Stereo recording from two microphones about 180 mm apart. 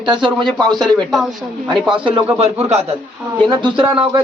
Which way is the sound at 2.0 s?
30° right (ahead or behind).